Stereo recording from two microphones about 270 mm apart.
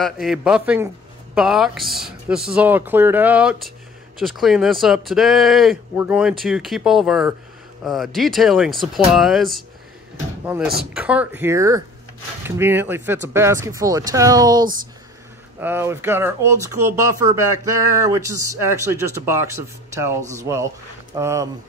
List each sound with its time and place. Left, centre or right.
0.0 s speech: centre
14.6 s speech: right
15.6 s speech: centre